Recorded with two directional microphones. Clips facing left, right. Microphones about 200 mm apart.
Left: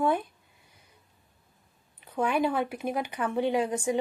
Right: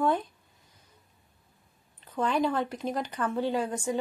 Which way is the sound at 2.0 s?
10° left (ahead or behind).